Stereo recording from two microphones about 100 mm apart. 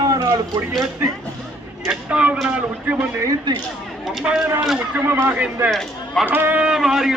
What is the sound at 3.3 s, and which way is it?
Speech, 40° right (ahead or behind).